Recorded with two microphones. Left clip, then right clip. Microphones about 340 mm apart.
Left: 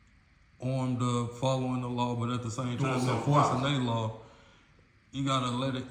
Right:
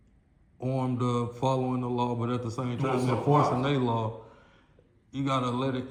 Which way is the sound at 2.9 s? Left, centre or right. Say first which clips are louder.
Right 5 dB; right.